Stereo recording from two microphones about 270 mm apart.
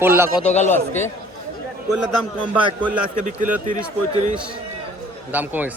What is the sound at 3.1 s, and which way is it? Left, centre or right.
Speech, right.